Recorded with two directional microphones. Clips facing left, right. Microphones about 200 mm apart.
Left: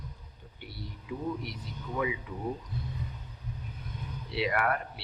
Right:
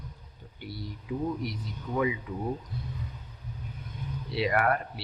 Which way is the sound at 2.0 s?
45° right (ahead or behind).